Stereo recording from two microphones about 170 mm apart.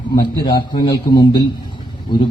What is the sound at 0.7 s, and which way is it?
Speech, 25° left (ahead or behind).